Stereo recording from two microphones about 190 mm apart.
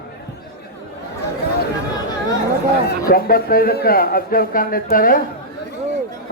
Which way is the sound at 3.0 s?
50° left (ahead or behind).